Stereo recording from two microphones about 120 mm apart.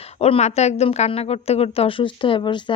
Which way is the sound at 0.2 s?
60° left (ahead or behind).